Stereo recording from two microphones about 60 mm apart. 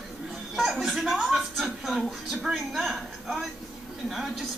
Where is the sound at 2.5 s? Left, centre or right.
Centre.